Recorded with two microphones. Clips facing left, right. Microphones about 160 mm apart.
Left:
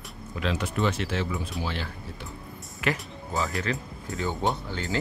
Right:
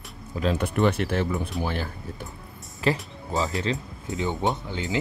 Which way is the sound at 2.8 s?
35° right (ahead or behind).